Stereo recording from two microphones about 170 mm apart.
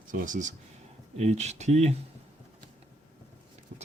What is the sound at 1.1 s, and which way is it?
Speech, 40° right (ahead or behind).